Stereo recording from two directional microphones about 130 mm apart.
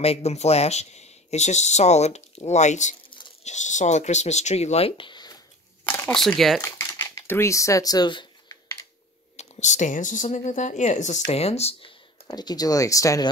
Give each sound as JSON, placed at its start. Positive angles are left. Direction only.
{"t": 0.0, "sound": "speech", "side_deg": 50}
{"t": 5.9, "sound": "a sound", "side_deg": 15}
{"t": 6.1, "sound": "speech", "side_deg": 5}
{"t": 6.6, "sound": "crumpling", "side_deg": 25}
{"t": 9.4, "sound": "speech", "side_deg": 65}
{"t": 12.3, "sound": "speech", "side_deg": 30}